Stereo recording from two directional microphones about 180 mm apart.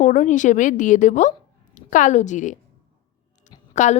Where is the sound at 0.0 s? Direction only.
45° left (ahead or behind).